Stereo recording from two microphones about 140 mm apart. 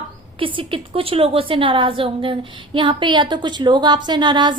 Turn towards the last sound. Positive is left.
turn(degrees=-30)  # may be behind; listen again after turning